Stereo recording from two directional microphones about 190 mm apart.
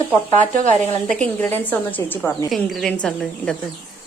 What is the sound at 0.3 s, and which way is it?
Speech, 40° right (ahead or behind).